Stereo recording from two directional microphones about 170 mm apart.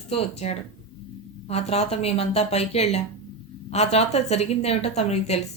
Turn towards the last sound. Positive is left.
turn(degrees=40)  # may be behind; listen again after turning